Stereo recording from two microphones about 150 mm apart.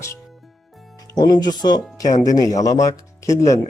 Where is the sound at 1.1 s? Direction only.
25° left (ahead or behind).